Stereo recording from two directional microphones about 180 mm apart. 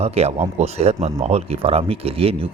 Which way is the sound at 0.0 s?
35° right (ahead or behind).